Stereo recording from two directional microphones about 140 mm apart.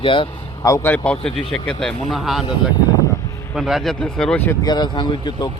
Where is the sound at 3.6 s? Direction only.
Centre (ahead or behind).